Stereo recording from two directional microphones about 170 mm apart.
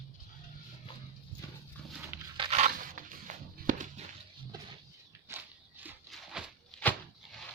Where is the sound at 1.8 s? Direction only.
5° left (ahead or behind).